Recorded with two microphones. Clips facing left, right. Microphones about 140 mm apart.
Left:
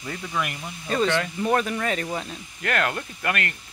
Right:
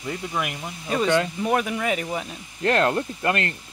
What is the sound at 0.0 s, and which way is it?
Speech, 15° right (ahead or behind).